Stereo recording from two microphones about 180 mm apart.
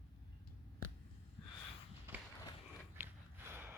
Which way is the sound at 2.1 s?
10° right (ahead or behind).